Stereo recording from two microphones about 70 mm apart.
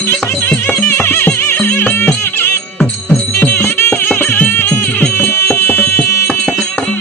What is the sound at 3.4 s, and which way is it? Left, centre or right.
Music, left.